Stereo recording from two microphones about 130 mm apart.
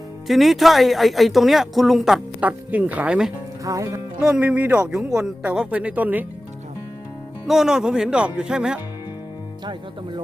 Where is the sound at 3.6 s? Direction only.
25° right (ahead or behind).